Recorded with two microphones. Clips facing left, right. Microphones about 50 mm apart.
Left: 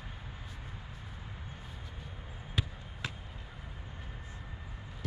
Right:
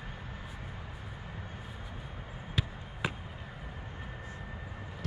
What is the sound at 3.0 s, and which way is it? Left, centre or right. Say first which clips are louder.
Basketball bounce: right 5 dB; centre.